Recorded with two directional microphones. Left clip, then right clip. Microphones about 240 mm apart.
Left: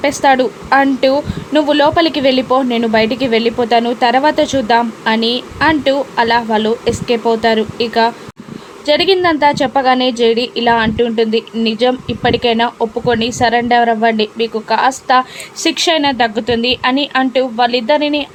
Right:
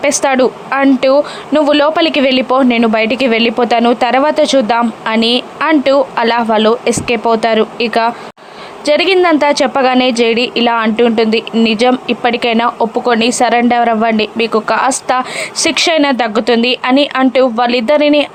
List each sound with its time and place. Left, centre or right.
0.0 s a woman's voice: centre